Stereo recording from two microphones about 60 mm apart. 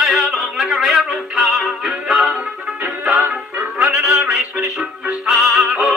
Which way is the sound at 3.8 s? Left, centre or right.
Centre.